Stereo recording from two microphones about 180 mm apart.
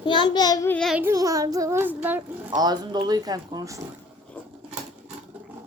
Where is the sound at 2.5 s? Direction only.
25° right (ahead or behind).